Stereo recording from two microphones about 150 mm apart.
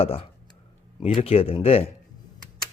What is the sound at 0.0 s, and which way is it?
Speech, 40° left (ahead or behind).